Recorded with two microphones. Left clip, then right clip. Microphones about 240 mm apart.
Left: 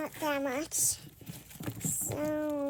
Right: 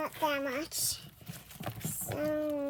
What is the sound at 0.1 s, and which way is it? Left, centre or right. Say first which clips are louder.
Speech: even; left.